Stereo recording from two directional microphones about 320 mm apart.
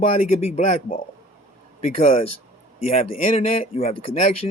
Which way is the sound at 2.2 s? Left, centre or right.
Left.